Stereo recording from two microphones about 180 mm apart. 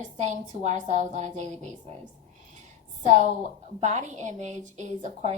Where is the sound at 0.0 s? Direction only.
40° right (ahead or behind).